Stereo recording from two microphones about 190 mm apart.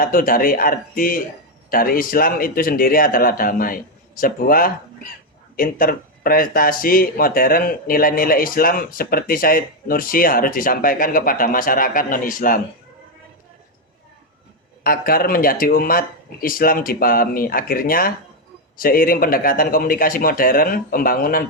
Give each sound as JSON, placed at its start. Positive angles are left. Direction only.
{"t": 0.0, "sound": "speech", "side_deg": 45}
{"t": 14.8, "sound": "speech", "side_deg": 50}